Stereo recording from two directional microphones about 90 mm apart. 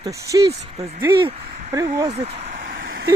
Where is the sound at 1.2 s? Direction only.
90° right.